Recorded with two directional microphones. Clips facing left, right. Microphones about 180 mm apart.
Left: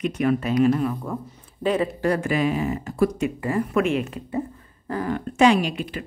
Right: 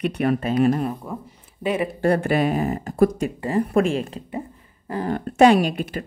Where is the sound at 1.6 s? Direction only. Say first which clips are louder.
Left 1 dB; 10° right (ahead or behind).